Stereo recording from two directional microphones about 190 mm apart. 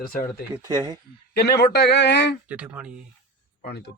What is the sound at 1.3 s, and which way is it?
Speech, 60° left (ahead or behind).